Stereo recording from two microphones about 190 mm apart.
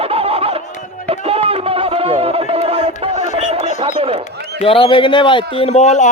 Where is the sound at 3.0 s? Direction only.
35° right (ahead or behind).